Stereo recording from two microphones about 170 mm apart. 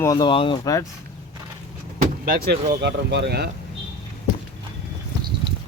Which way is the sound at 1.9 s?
55° right (ahead or behind).